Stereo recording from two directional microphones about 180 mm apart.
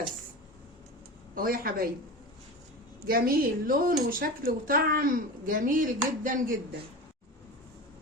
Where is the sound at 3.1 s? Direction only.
55° right (ahead or behind).